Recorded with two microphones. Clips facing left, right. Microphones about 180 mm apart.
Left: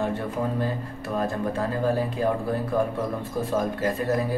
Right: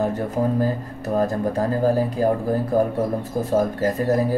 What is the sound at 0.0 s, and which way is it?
Speech, 40° right (ahead or behind).